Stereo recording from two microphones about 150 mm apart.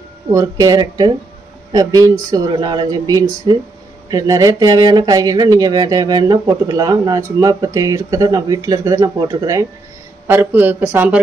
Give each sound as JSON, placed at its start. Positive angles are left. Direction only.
{"t": 0.3, "sound": "speech", "side_deg": -20}